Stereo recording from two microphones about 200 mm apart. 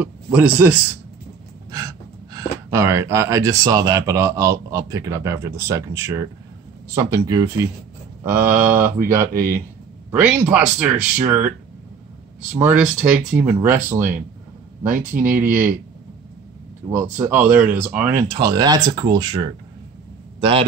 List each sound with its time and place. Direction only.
0.0 s speech: 5° right (ahead or behind)
1.7 s speech: 15° right (ahead or behind)
15.2 s speech: 10° right (ahead or behind)
16.9 s speech: 10° right (ahead or behind)
18.3 s a man's voice: 20° right (ahead or behind)